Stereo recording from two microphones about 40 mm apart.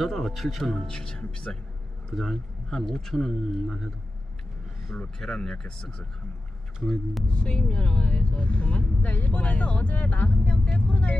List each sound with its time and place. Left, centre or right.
0.0 s speech: centre
0.7 s speech: centre
5.2 s speech: centre
7.4 s speech: centre; by 10.3 s left
10.4 s speech: left